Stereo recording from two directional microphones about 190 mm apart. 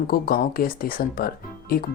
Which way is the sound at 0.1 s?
50° left (ahead or behind).